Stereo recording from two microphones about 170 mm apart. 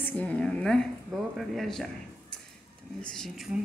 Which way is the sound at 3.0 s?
5° left (ahead or behind).